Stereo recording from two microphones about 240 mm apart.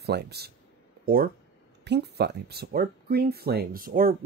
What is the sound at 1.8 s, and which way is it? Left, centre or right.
Speech, right.